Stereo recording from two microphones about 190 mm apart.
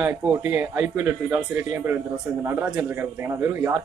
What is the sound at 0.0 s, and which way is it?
Speech, 10° right (ahead or behind).